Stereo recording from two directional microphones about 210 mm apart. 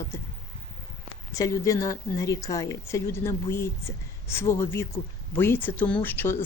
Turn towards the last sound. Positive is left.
turn(degrees=10)  # may be behind; listen again after turning